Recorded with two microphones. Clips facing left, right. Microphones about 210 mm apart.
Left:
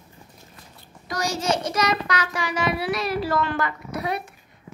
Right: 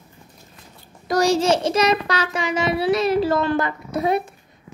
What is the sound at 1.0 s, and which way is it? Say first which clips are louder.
Child singing: right 8 dB; 35° right (ahead or behind).